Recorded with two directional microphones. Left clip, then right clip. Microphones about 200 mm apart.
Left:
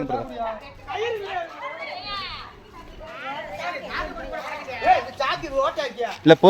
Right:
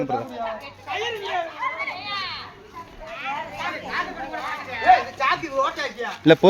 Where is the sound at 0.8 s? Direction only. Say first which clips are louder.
Even; 55° right (ahead or behind).